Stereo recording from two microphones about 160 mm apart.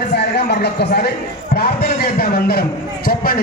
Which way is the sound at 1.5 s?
75° left (ahead or behind).